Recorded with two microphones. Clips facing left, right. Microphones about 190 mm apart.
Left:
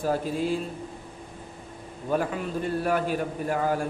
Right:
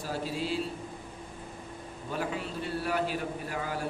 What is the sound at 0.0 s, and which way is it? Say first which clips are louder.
Speech: left 7 dB; 50° left (ahead or behind).